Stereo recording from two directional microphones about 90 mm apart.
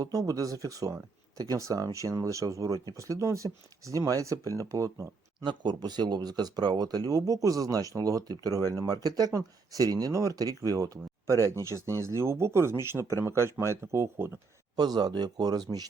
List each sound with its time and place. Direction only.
0.0 s speech: 40° right (ahead or behind)
5.5 s speech: 55° right (ahead or behind); by 14.3 s 30° right (ahead or behind)
14.8 s speech: 50° right (ahead or behind)